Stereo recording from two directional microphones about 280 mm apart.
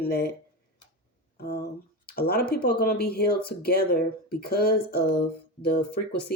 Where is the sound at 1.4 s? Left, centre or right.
Left.